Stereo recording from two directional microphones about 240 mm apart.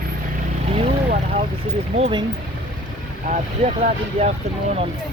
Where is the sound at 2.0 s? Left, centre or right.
Right.